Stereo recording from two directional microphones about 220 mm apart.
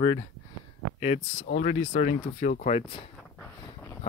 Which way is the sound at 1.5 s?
40° left (ahead or behind).